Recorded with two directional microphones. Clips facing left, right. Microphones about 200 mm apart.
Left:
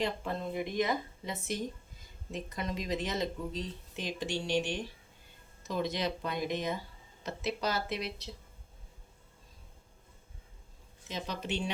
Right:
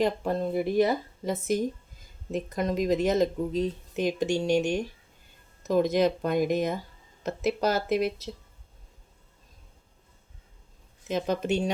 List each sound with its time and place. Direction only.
0.0 s speech: 40° right (ahead or behind)
11.1 s speech: 45° right (ahead or behind)